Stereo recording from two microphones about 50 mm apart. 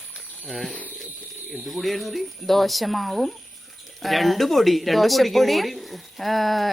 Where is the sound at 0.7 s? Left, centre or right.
Left.